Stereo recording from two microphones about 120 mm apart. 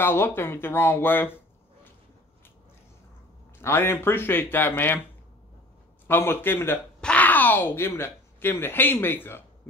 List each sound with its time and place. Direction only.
0.0 s speech: 20° left (ahead or behind)
3.6 s speech: 20° left (ahead or behind)
6.0 s a man's voice: 20° left (ahead or behind)